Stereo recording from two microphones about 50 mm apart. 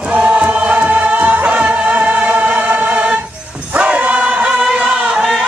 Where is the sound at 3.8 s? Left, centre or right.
Right.